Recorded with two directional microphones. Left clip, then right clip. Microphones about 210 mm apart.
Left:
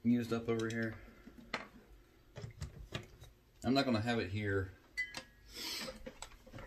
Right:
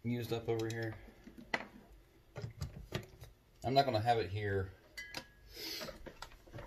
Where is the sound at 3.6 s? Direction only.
20° left (ahead or behind).